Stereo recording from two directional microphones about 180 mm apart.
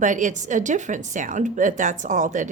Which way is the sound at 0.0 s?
45° right (ahead or behind).